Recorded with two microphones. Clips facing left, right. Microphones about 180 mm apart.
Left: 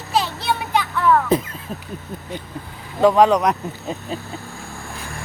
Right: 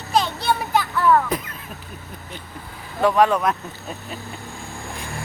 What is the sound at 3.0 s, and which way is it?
Speech, 20° left (ahead or behind).